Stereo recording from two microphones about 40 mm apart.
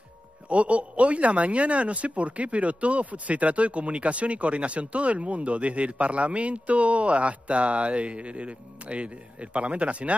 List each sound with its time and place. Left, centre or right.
0.5 s speech: right